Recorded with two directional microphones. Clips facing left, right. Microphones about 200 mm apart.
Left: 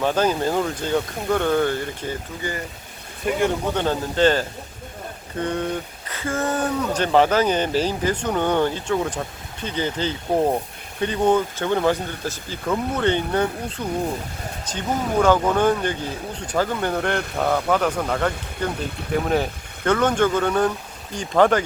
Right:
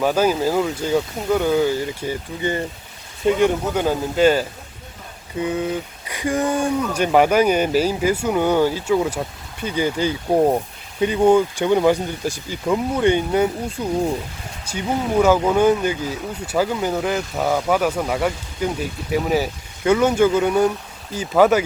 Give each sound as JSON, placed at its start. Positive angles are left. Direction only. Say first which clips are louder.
{"t": 0.0, "sound": "speech", "louder": "right 2 dB", "side_deg": -10}
{"t": 2.4, "sound": "speech", "louder": "right 6 dB", "side_deg": -25}
{"t": 3.8, "sound": "speech", "louder": "right 2 dB", "side_deg": -10}